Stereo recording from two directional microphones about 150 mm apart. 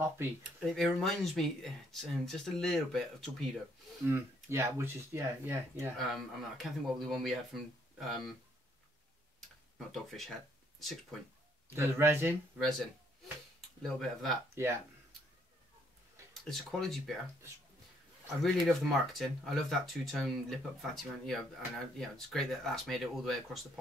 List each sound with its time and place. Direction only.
0.6 s speech: centre (ahead or behind)
4.0 s speech: 20° right (ahead or behind)
5.9 s speech: centre (ahead or behind)
9.9 s speech: centre (ahead or behind)
11.7 s speech: 15° right (ahead or behind)
12.5 s speech: centre (ahead or behind)
13.9 s speech: centre (ahead or behind)
14.5 s speech: 20° right (ahead or behind)
16.4 s speech: centre (ahead or behind)
18.4 s speech: centre (ahead or behind)